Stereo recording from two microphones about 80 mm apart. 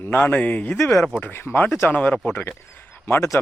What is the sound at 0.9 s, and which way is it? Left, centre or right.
Speech, centre.